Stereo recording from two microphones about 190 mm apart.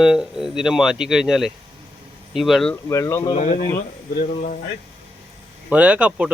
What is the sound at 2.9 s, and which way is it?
Speech, 15° left (ahead or behind).